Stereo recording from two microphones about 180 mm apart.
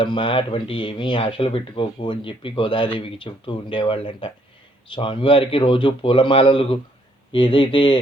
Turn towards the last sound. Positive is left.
turn(degrees=25)  # may be behind; listen again after turning